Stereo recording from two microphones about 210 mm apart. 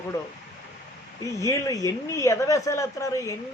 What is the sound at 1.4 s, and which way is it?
A man's voice, 15° left (ahead or behind).